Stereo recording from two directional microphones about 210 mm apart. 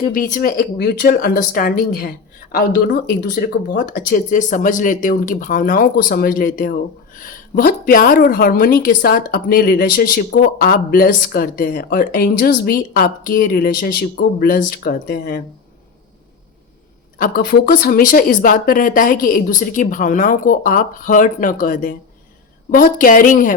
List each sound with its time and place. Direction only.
0.1 s a woman's voice: 40° left (ahead or behind)
17.2 s speech: 40° left (ahead or behind)